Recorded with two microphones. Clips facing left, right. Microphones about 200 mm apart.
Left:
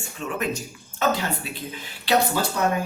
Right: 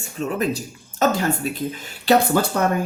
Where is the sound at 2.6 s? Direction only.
55° right (ahead or behind).